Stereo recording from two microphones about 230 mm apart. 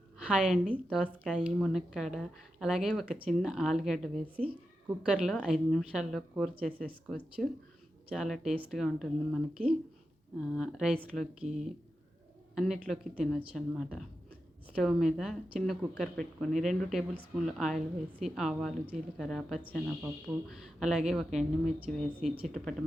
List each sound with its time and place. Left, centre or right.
0.2 s a woman's voice: centre
10.5 s a woman's voice: centre
12.5 s a woman's voice: centre